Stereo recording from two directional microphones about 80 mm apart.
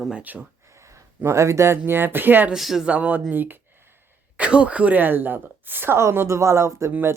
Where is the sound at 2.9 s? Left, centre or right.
Centre; by 6.7 s right.